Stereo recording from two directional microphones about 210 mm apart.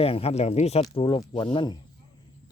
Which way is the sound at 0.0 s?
25° left (ahead or behind).